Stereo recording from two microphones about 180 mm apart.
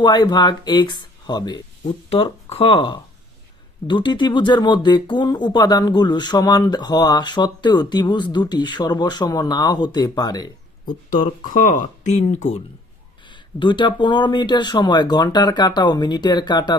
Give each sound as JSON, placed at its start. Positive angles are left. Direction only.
{"t": 0.0, "sound": "speech", "side_deg": 25}
{"t": 10.9, "sound": "speech", "side_deg": 50}
{"t": 13.6, "sound": "speech", "side_deg": 25}